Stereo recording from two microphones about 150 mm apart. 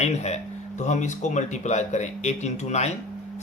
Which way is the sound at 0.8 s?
55° left (ahead or behind).